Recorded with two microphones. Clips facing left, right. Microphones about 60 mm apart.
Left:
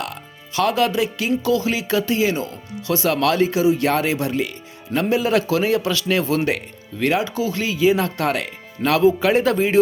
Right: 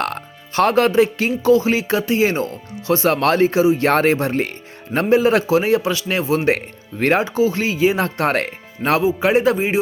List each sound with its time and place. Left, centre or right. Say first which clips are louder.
0.0 s music: right 6 dB; right
1.4 s a man's voice: right 8 dB; right
9.2 s speech: right 1 dB; right